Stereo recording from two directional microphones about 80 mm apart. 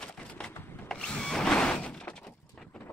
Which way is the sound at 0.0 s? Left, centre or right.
Centre.